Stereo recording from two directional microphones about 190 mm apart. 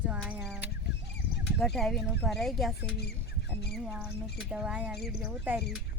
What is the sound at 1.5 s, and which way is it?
Speech, centre (ahead or behind).